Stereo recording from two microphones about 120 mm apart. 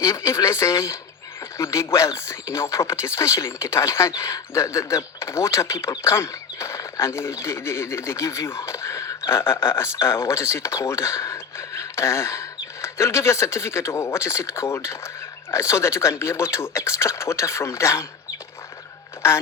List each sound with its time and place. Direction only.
0.0 s speech: 20° left (ahead or behind)